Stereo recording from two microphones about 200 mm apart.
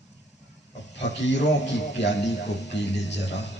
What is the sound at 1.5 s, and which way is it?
Speech, 60° left (ahead or behind).